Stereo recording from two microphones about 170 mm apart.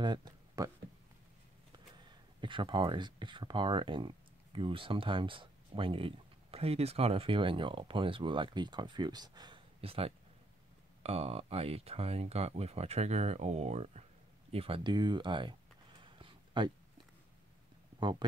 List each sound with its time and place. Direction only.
0.0 s speech: 25° right (ahead or behind)
2.0 s speech: 30° right (ahead or behind)
16.0 s a sound: 30° right (ahead or behind)